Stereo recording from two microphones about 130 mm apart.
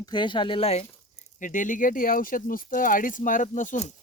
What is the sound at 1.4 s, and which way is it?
Speech, 85° left.